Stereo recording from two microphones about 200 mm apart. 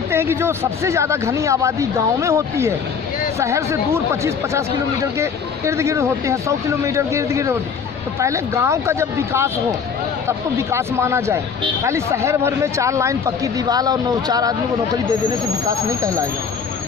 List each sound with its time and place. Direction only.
0.1 s speech: 10° right (ahead or behind)
15.6 s speech: 15° right (ahead or behind)